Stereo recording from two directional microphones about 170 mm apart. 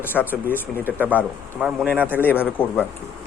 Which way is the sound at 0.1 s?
Centre (ahead or behind).